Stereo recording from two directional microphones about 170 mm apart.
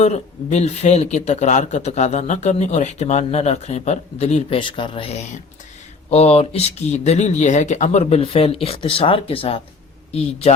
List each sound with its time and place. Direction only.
0.0 s speech: 40° left (ahead or behind)